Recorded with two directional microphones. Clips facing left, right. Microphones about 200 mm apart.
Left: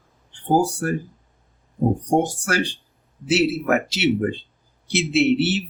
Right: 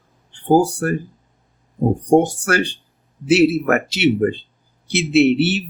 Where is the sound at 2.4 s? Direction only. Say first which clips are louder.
Right 4 dB; 60° right (ahead or behind).